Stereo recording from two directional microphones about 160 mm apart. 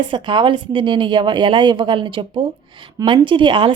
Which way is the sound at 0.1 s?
30° right (ahead or behind).